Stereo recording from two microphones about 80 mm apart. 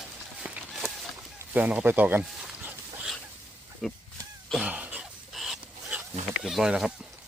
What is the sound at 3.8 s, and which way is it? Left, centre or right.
Speech, centre.